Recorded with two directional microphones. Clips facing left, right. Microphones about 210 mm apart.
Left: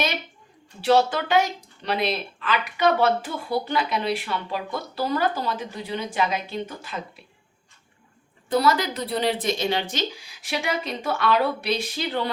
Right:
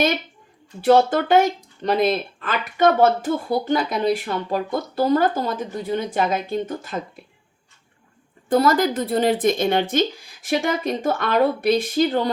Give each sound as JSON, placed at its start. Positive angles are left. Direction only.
{"t": 0.8, "sound": "speech", "side_deg": -50}
{"t": 8.4, "sound": "speech", "side_deg": -50}